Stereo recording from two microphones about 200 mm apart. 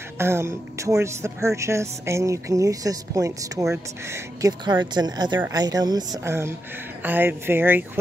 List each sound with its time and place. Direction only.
0.2 s speech: 10° right (ahead or behind)